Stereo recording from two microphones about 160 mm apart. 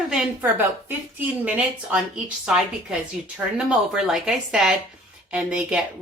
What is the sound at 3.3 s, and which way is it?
Speech, 5° right (ahead or behind).